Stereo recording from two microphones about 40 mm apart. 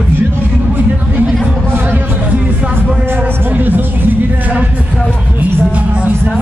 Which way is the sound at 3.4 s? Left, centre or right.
Right.